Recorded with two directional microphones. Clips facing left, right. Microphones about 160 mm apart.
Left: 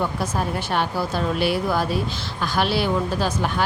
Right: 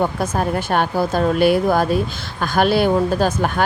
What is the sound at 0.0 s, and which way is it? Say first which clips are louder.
Speech: right 5 dB; 50° right (ahead or behind).